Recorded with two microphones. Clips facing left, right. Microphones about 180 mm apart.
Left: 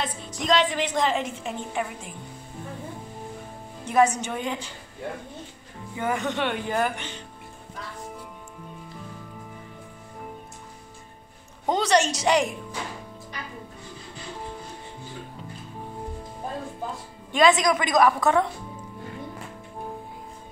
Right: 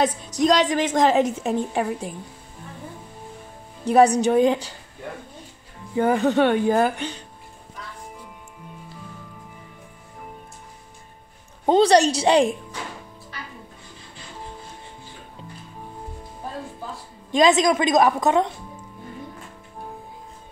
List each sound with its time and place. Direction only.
0.0 s a woman's voice: 40° right (ahead or behind)
3.8 s a woman's voice: 35° right (ahead or behind)
5.9 s a woman's voice: 35° right (ahead or behind)
11.6 s a woman's voice: 30° right (ahead or behind)
17.4 s a woman's voice: 25° right (ahead or behind)